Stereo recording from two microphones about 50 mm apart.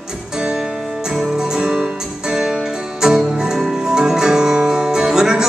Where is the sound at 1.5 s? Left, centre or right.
Centre.